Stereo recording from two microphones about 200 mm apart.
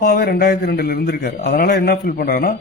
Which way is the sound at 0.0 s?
50° left (ahead or behind).